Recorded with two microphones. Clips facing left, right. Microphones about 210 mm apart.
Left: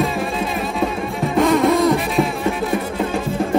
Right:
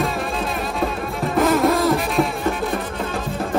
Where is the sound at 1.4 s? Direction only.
Centre (ahead or behind).